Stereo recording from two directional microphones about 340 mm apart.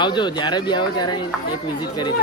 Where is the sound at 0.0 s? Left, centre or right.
Centre.